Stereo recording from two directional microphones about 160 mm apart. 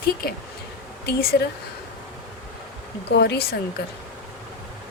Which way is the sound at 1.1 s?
80° left.